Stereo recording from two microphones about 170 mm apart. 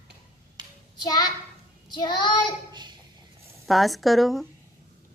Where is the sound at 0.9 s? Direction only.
25° left (ahead or behind).